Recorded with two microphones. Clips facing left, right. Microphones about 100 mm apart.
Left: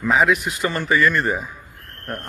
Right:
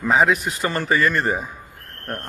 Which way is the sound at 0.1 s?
30° right (ahead or behind).